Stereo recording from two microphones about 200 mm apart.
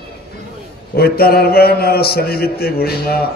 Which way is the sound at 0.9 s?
50° left (ahead or behind).